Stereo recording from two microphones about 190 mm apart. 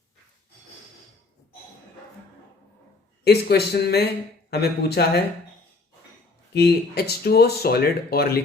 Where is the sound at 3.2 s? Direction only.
60° left (ahead or behind).